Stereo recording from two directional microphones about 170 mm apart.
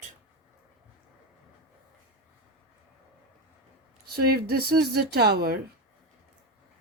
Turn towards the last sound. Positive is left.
turn(degrees=-65)  # may be behind; listen again after turning